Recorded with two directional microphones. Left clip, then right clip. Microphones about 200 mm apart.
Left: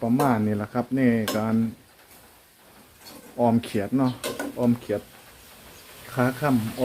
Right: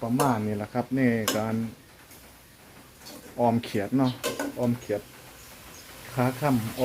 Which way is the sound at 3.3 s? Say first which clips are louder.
Left 2 dB; 10° left (ahead or behind).